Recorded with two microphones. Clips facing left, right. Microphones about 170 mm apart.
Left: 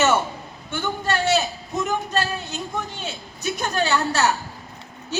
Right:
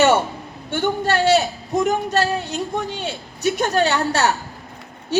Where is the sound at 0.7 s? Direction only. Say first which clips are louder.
Right 5 dB; 65° right (ahead or behind).